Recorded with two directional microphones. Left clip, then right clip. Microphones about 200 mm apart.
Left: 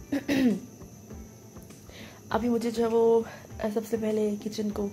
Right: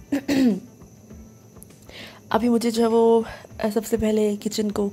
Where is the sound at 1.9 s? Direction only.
35° right (ahead or behind).